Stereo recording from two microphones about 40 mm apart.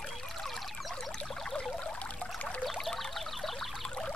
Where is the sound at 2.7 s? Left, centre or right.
Centre.